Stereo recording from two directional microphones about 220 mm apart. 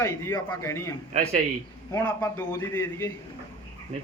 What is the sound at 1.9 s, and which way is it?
Speech, 10° left (ahead or behind).